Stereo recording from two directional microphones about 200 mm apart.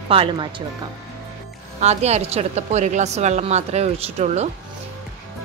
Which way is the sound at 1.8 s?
35° right (ahead or behind).